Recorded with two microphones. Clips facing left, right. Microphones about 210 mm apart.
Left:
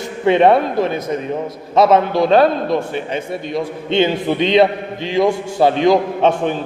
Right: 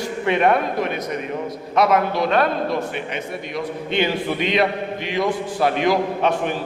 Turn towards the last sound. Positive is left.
turn(degrees=25)  # may be behind; listen again after turning